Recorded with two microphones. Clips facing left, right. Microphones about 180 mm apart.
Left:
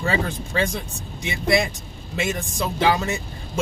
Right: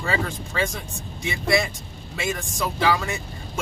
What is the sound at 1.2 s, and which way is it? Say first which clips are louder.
Speech: left 2 dB; 20° left (ahead or behind).